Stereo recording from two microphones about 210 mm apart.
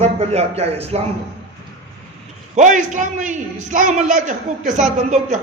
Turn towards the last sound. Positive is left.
turn(degrees=-35)  # may be behind; listen again after turning